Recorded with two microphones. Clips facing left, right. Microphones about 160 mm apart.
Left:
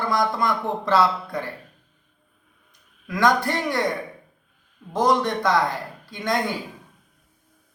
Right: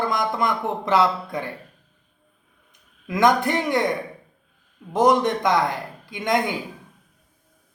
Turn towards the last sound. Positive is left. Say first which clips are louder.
# right 2 dB
turn(degrees=-15)  # may be behind; listen again after turning